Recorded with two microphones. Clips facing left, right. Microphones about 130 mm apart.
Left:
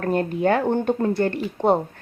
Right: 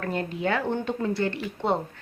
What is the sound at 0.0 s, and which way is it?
A woman's voice, 45° left (ahead or behind).